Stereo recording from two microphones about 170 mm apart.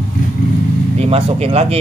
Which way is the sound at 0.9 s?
35° right (ahead or behind).